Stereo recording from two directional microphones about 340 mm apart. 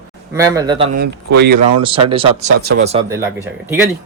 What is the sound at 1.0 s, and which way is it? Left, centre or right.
Speech, right.